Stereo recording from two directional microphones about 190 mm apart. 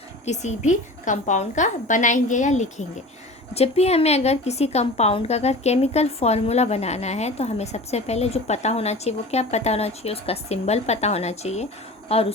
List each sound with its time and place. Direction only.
0.3 s a woman's voice: 40° left (ahead or behind)